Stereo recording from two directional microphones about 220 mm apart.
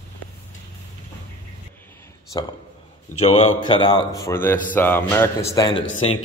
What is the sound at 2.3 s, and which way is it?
Speech, 20° left (ahead or behind).